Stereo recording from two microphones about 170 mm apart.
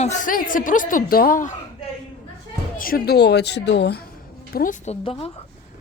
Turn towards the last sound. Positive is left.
turn(degrees=35)  # may be behind; listen again after turning